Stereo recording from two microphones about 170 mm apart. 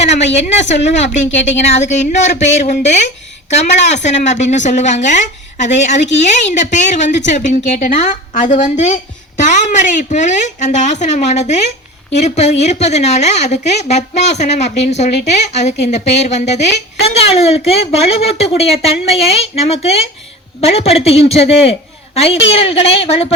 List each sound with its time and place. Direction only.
1.7 s a woman's voice: 40° left (ahead or behind)